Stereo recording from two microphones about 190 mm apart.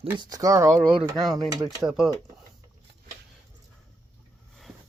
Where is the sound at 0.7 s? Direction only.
Centre (ahead or behind).